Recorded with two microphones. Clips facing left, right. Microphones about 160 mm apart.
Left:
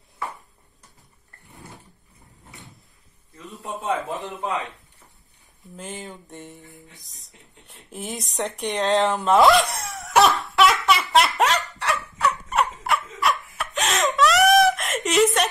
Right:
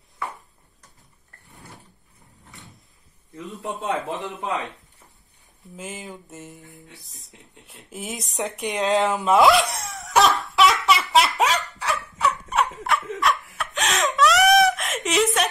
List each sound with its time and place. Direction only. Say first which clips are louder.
3.8 s a man's voice: left 1 dB; 20° right (ahead or behind)
5.8 s music: even; 5° right (ahead or behind)
8.5 s a sound: even; 5° right (ahead or behind)
12.9 s laughter: even; centre (ahead or behind)
13.6 s wail: left 1 dB; centre (ahead or behind)